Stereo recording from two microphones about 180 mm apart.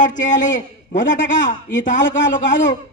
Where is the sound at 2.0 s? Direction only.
90° left.